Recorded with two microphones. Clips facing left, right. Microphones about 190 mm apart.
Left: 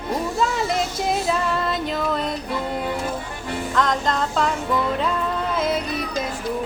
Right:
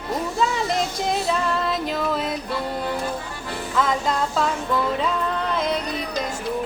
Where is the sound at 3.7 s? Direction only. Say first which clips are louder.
Even; 5° right (ahead or behind).